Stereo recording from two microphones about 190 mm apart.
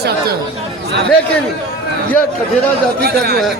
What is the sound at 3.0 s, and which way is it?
Speech, 55° right (ahead or behind).